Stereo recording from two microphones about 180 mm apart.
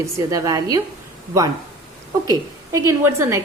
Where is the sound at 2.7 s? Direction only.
15° right (ahead or behind).